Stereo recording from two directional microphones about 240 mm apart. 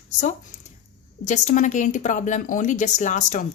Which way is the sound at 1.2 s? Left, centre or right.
Left.